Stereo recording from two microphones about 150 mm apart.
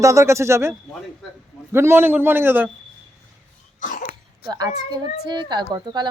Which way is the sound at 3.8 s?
60° left (ahead or behind).